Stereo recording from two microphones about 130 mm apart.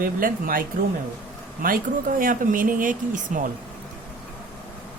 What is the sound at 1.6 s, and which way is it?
Speech, 90° right.